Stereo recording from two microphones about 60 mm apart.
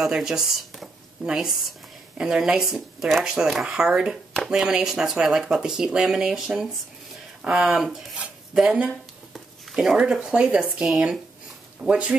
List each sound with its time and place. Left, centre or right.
0.0 s speech: centre
9.3 s a sound: centre
10.2 s speech: centre
11.8 s speech: centre